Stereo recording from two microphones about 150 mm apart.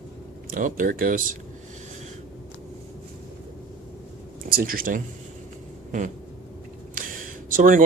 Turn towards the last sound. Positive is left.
turn(degrees=-60)  # may be behind; listen again after turning